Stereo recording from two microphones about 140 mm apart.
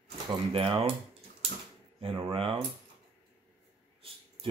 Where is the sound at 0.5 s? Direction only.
40° right (ahead or behind).